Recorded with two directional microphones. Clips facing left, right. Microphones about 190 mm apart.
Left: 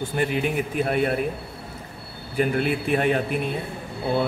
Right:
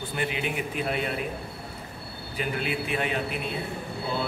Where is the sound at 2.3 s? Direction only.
50° left (ahead or behind).